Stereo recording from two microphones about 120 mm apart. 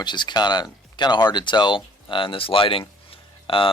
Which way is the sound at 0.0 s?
40° left (ahead or behind).